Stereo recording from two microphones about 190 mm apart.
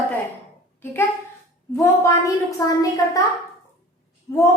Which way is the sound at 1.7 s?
15° left (ahead or behind).